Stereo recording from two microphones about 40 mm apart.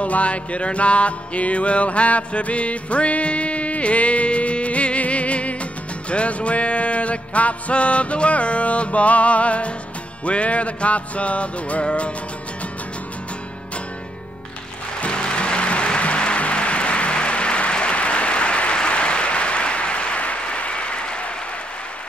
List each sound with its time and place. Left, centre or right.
0.0 s music: left
15.0 s music: left